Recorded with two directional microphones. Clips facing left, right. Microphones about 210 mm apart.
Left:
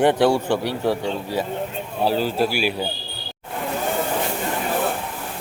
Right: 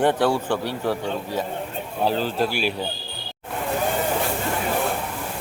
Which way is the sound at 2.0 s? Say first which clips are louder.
Left 2 dB; 10° left (ahead or behind).